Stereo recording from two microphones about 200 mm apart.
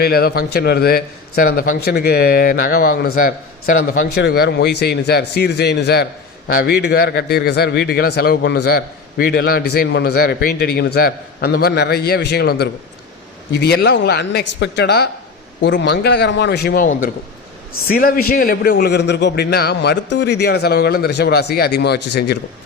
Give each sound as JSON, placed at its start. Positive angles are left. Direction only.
{"t": 0.0, "sound": "a man's voice", "side_deg": 50}